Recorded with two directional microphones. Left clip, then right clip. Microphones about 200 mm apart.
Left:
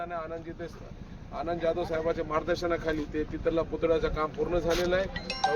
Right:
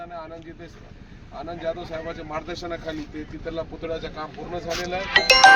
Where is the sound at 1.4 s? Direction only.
Centre (ahead or behind).